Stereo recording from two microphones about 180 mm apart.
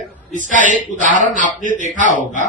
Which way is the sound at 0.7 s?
45° right (ahead or behind).